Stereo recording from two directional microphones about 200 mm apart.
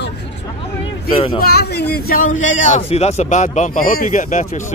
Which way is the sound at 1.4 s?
50° left (ahead or behind).